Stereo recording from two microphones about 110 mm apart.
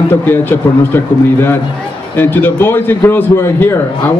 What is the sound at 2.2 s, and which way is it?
Speech, 20° left (ahead or behind).